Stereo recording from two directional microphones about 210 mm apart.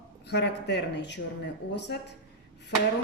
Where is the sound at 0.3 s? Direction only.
55° left (ahead or behind).